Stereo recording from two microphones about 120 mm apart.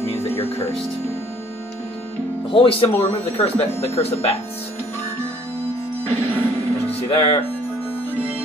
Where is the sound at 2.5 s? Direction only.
50° left (ahead or behind).